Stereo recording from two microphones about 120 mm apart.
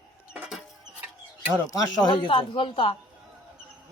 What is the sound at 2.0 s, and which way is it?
Speech, 45° left (ahead or behind).